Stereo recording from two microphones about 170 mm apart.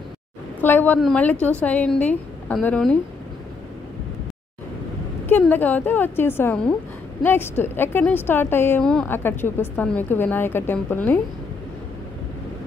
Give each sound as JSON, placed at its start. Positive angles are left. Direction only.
{"t": 0.6, "sound": "a woman's voice", "side_deg": 10}
{"t": 5.4, "sound": "a woman's voice", "side_deg": 10}